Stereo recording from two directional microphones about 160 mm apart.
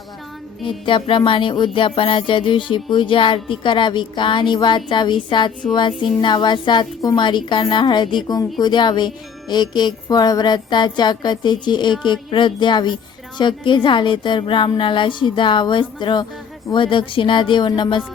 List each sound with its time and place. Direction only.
0.6 s music: 30° left (ahead or behind)